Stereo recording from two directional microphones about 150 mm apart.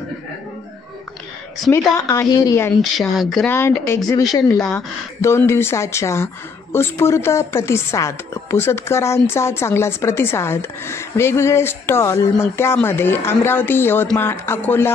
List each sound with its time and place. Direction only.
1.7 s a woman's voice: 20° left (ahead or behind)
2.8 s speech: centre (ahead or behind)
3.4 s speech: 15° left (ahead or behind)